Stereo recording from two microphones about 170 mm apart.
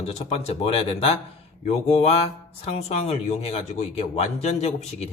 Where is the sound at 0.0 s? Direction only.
40° left (ahead or behind).